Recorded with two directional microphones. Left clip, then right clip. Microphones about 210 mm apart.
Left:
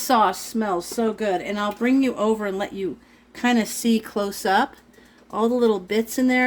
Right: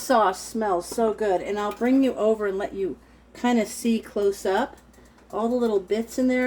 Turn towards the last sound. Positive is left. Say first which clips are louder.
# left 3 dB
turn(degrees=55)  # may be behind; listen again after turning